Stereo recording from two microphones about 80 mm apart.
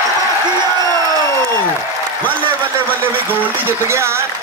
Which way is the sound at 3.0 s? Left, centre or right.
Right.